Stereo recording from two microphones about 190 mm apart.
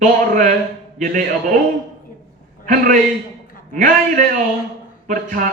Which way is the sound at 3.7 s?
45° right (ahead or behind).